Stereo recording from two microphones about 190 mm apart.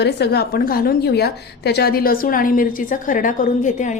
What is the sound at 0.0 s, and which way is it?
A woman's voice, 55° left (ahead or behind).